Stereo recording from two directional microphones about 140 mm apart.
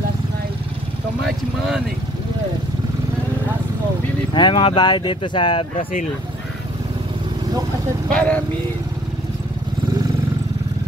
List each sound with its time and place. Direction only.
4.3 s speech: 35° left (ahead or behind)
8.1 s speech: 10° left (ahead or behind)